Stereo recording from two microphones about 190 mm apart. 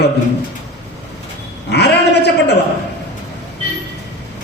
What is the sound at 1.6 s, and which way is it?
Speech, 65° left (ahead or behind).